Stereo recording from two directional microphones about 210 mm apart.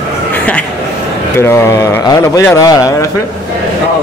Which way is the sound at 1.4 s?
15° left (ahead or behind).